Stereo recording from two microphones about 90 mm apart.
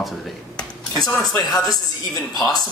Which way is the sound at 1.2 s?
45° left (ahead or behind).